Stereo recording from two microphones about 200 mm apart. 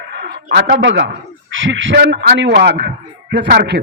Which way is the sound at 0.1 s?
55° right (ahead or behind).